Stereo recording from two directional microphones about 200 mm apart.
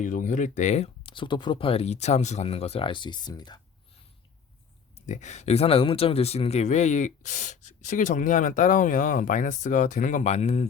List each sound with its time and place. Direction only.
0.0 s speech: 40° left (ahead or behind); by 3.6 s 20° left (ahead or behind)
4.9 s speech: 35° left (ahead or behind)